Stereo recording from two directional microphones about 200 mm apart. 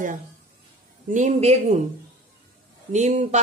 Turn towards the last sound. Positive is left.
turn(degrees=-35)  # may be behind; listen again after turning